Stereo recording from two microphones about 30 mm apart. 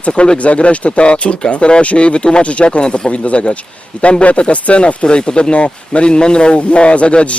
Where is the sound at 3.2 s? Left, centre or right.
Left.